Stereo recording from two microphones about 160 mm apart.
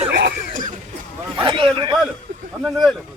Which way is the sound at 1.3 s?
30° right (ahead or behind).